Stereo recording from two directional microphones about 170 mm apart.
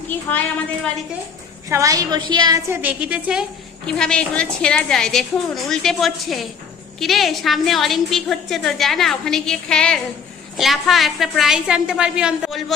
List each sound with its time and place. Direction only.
0.3 s a woman's voice: 10° left (ahead or behind)
1.7 s a woman's voice: 20° right (ahead or behind)
2.8 s a woman's voice: 5° right (ahead or behind)
3.8 s a woman's voice: 5° left (ahead or behind)